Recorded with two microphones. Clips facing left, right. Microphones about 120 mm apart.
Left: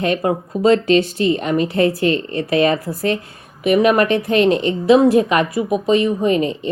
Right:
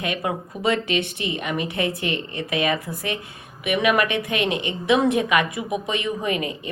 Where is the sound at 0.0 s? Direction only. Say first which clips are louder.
Left 8 dB; 35° left (ahead or behind).